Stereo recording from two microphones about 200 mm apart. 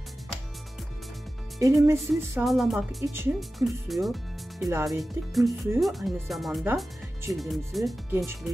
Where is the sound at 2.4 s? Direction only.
Centre (ahead or behind).